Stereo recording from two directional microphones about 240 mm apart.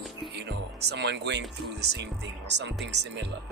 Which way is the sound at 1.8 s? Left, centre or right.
Right.